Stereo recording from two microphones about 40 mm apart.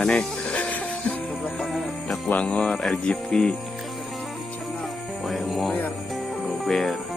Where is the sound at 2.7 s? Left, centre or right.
Centre.